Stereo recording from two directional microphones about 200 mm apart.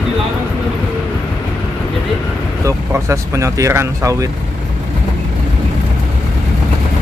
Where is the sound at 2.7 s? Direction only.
15° right (ahead or behind).